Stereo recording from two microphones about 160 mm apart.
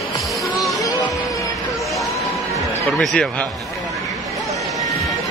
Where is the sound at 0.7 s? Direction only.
20° left (ahead or behind).